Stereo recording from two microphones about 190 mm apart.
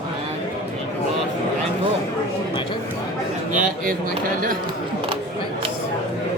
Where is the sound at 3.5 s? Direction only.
45° right (ahead or behind).